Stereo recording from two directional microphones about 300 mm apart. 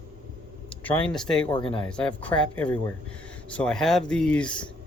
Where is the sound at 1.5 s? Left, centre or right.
Centre.